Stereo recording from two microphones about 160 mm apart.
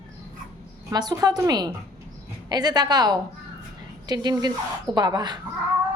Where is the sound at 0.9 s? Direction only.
25° right (ahead or behind).